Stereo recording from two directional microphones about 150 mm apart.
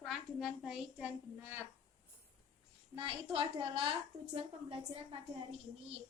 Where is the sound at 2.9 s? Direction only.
35° right (ahead or behind).